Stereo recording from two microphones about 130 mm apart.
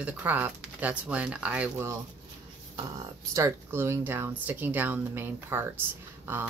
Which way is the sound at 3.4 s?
20° right (ahead or behind).